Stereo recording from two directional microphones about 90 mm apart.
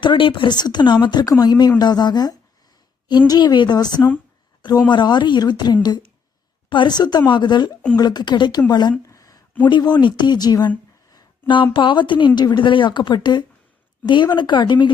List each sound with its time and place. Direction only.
0.0 s speech: 70° left (ahead or behind); by 9.0 s 55° left (ahead or behind)
9.0 s a sound: 40° left (ahead or behind)
9.6 s speech: 55° left (ahead or behind)
11.4 s speech: 65° left (ahead or behind)